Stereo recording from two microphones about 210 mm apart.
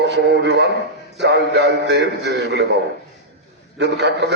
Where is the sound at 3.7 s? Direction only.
55° right (ahead or behind).